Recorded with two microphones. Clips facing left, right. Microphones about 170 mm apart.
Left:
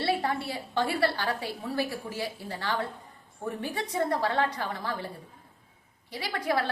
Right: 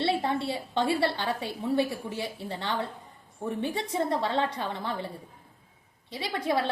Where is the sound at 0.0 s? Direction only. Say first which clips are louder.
Right 1 dB; 25° right (ahead or behind).